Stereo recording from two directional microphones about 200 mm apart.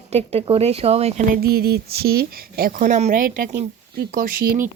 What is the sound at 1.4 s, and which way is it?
Speech, 50° right (ahead or behind).